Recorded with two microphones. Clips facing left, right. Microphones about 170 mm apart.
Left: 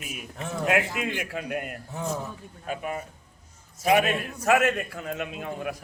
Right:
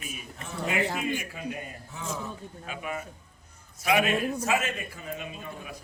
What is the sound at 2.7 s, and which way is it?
A man's voice, 40° left (ahead or behind).